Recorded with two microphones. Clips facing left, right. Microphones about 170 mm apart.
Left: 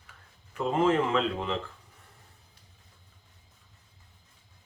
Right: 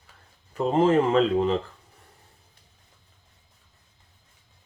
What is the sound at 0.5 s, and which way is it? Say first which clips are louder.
Speech: right 5 dB; 35° right (ahead or behind).